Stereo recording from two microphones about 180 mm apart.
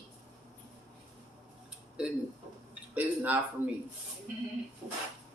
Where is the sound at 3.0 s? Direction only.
10° right (ahead or behind).